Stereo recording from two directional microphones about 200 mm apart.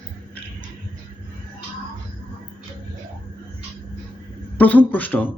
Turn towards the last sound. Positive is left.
turn(degrees=10)  # may be behind; listen again after turning